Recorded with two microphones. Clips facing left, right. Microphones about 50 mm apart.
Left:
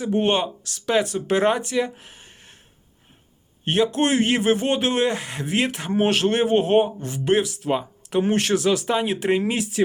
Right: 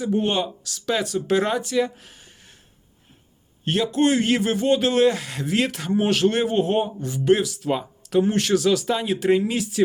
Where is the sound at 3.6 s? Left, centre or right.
Left.